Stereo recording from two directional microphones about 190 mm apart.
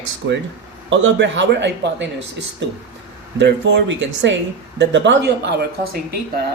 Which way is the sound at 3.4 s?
65° right (ahead or behind).